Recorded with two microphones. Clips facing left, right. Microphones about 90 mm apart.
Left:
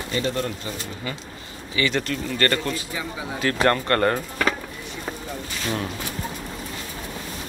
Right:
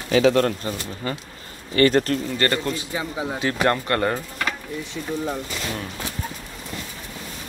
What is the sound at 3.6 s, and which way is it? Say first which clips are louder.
Speech: left 2 dB; 15° right (ahead or behind).